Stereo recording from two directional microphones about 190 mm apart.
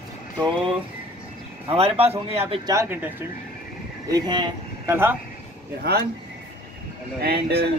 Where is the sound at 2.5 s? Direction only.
20° right (ahead or behind).